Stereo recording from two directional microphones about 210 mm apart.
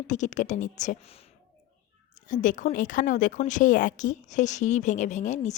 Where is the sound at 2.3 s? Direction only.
40° left (ahead or behind).